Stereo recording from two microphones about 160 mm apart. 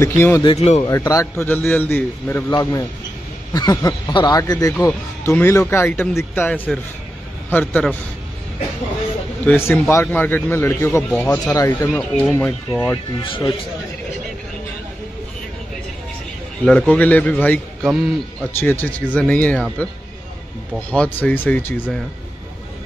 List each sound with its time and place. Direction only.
0.0 s a man's voice: 15° left (ahead or behind)
0.4 s speech: 30° left (ahead or behind)
0.8 s a man's voice: 20° left (ahead or behind)
3.5 s a man's voice: 25° left (ahead or behind)
9.5 s a man's voice: 15° left (ahead or behind)
11.1 s a man's voice: 5° left (ahead or behind)
11.5 s a man's voice: 20° left (ahead or behind)
11.9 s a man's voice: 5° left (ahead or behind)
13.2 s speech: 35° left (ahead or behind)
16.6 s a man's voice: 5° left (ahead or behind)
17.8 s speech: centre (ahead or behind)
18.6 s a man's voice: 10° left (ahead or behind)
20.9 s a man's voice: 10° left (ahead or behind)